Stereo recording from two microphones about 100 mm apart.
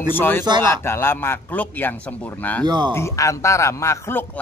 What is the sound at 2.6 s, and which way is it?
Speech, 45° right (ahead or behind).